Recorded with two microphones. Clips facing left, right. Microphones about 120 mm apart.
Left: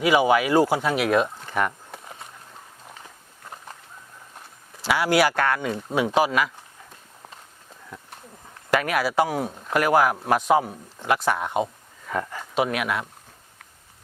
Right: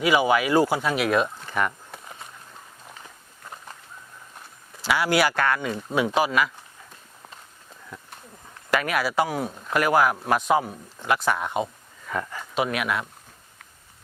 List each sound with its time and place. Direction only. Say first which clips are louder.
0.0 s a sound: left 2 dB; 50° left (ahead or behind); by 3.8 s 30° left (ahead or behind)
4.9 s speech: left 2 dB; 45° left (ahead or behind)
7.9 s a sound: left 1 dB; 30° left (ahead or behind)
8.7 s speech: left 2 dB; 45° left (ahead or behind)
9.5 s speech: left 1 dB; 25° left (ahead or behind)
9.7 s speech: left 1 dB; 40° left (ahead or behind)
11.2 s speech: left 1 dB; 30° left (ahead or behind)